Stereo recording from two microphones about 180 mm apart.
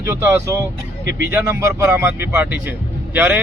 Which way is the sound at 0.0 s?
10° right (ahead or behind).